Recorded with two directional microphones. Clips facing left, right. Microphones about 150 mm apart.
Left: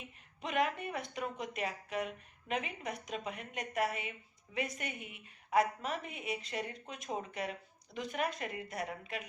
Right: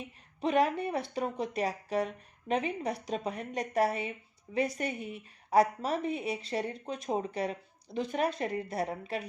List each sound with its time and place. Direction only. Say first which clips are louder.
0.4 s speech: right 7 dB; 35° right (ahead or behind)